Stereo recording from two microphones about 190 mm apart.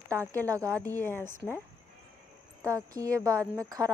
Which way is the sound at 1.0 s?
10° left (ahead or behind).